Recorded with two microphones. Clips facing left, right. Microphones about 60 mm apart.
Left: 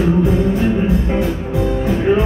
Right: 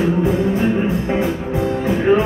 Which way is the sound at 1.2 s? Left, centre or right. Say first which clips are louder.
Left 1 dB; right.